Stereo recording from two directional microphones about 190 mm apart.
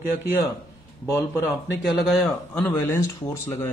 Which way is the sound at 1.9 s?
Centre (ahead or behind).